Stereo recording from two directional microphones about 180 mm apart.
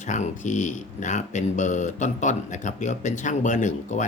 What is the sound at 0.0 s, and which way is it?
Speech, 40° left (ahead or behind).